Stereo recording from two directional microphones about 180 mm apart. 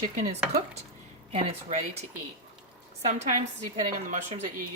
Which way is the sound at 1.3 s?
35° right (ahead or behind).